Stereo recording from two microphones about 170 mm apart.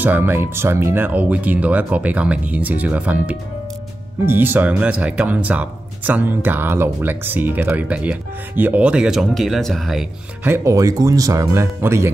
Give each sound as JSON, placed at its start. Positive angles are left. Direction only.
{"t": 0.0, "sound": "speech", "side_deg": -10}
{"t": 10.4, "sound": "speech", "side_deg": -15}